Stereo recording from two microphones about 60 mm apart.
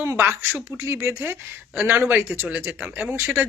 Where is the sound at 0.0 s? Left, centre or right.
Right.